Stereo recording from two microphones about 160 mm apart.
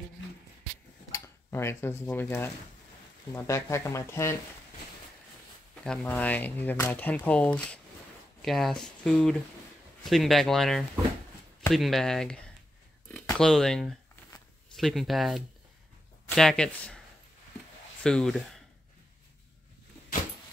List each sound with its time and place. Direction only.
1.1 s speech: 15° left (ahead or behind)
5.9 s speech: 10° left (ahead or behind)
18.0 s speech: 5° left (ahead or behind)